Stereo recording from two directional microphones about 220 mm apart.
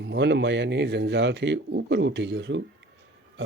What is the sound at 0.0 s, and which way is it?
Speech, 50° right (ahead or behind).